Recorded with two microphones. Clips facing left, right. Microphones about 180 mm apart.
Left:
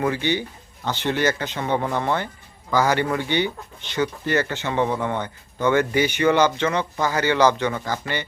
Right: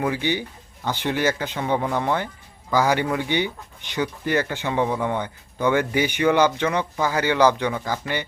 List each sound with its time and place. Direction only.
0.0 s speech: 10° right (ahead or behind)